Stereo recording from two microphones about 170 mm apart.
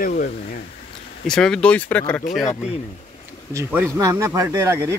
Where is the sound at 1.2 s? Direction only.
5° left (ahead or behind).